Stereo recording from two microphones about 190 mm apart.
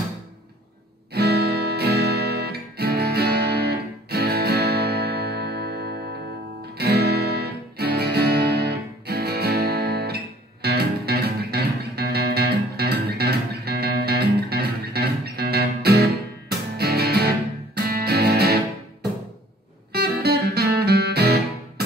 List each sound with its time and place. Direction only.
1.1 s music: 55° right (ahead or behind)
19.9 s music: 55° right (ahead or behind)